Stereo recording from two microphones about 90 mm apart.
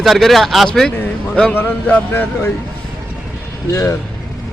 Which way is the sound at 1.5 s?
20° left (ahead or behind).